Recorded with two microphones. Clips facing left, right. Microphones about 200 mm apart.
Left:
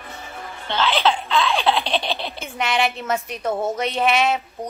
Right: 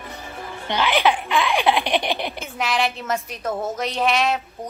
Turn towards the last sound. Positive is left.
turn(degrees=0)  # may be behind; listen again after turning